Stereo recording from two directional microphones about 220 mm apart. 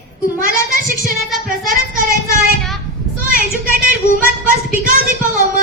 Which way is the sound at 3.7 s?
40° right (ahead or behind).